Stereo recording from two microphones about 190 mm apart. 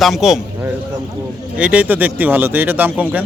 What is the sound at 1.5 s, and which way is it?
A man's voice, 5° right (ahead or behind).